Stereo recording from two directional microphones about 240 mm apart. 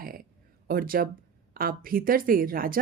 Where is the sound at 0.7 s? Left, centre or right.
Right.